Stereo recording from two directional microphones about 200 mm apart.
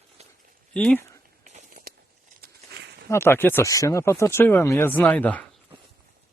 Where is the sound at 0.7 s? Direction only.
5° left (ahead or behind).